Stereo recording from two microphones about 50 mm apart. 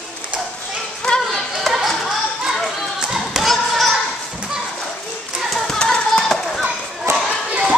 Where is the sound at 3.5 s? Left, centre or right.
Centre.